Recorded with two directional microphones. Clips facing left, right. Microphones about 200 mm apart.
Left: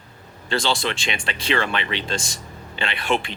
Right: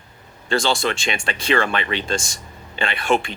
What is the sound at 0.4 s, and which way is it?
Speech, 45° right (ahead or behind).